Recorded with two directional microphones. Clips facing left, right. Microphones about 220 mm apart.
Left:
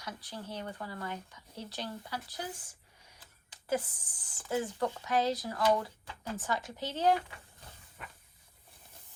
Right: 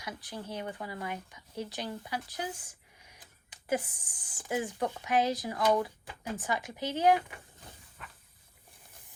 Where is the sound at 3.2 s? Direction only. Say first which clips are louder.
Right 2 dB; 15° right (ahead or behind).